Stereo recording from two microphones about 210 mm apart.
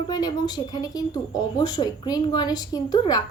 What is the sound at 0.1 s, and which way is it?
A woman's voice, 20° left (ahead or behind).